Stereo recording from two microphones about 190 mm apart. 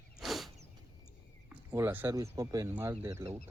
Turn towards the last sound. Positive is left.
turn(degrees=-15)  # may be behind; listen again after turning